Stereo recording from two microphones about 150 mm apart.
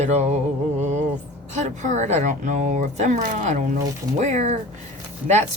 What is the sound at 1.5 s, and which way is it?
Speech, 55° right (ahead or behind).